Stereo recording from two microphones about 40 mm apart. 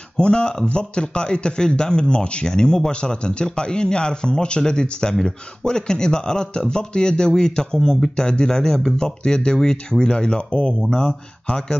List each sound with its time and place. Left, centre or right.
0.2 s speech: left